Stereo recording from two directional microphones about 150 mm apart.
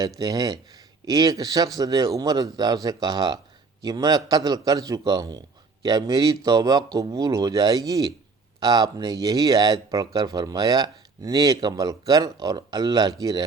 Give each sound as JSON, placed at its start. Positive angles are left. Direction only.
{"t": 0.2, "sound": "speech", "side_deg": -25}